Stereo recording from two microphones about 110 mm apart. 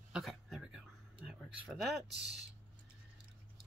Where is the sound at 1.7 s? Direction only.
Centre (ahead or behind).